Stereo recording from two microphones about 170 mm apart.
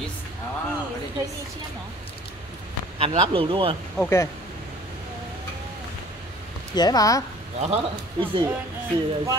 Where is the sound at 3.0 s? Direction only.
35° right (ahead or behind).